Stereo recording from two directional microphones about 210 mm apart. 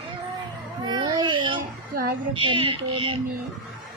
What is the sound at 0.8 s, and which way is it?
Speech, 20° right (ahead or behind).